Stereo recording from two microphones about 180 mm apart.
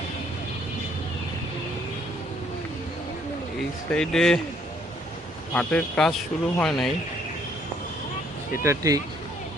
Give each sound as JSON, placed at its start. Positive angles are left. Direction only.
{"t": 3.9, "sound": "speech", "side_deg": 5}
{"t": 5.5, "sound": "speech", "side_deg": 5}
{"t": 8.6, "sound": "speech", "side_deg": -15}